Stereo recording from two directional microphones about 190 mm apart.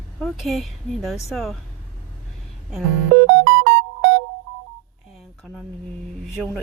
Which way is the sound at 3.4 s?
70° right (ahead or behind).